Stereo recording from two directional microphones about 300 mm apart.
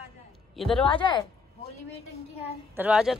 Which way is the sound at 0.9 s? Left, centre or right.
Centre.